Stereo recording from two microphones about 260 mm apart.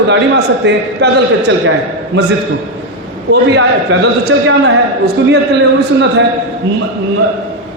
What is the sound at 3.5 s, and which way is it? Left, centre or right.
A man's voice, right.